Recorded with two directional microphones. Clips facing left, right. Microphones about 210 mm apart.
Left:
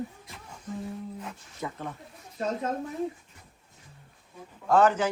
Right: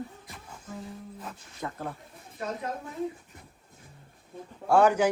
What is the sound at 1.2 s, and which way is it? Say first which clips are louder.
Speech: left 1 dB; 10° left (ahead or behind).